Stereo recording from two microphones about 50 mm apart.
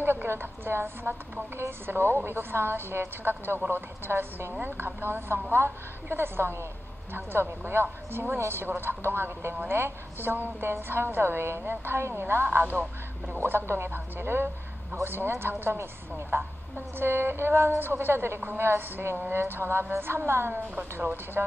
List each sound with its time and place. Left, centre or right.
0.0 s a woman's voice: right
10.3 s a woman's voice: right